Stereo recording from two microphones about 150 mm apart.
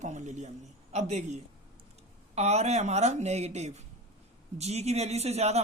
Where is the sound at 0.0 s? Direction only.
55° right (ahead or behind).